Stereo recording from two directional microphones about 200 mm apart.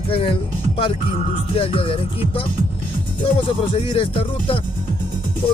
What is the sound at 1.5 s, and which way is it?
Speech, 30° left (ahead or behind).